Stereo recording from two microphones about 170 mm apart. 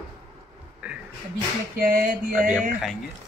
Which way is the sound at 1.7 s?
55° right (ahead or behind).